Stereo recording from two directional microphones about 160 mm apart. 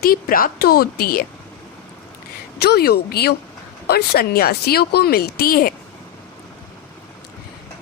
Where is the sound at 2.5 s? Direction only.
85° left; by 5.7 s 65° left (ahead or behind).